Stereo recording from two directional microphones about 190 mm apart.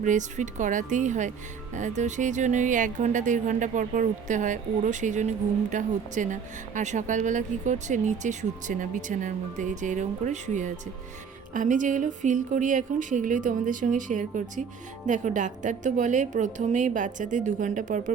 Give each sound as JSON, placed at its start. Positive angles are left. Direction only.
{"t": 0.0, "sound": "speech", "side_deg": -40}